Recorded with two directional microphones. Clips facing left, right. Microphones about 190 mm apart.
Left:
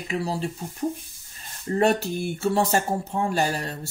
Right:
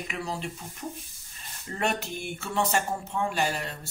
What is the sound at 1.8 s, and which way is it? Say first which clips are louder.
Speech: left 8 dB; 35° left (ahead or behind).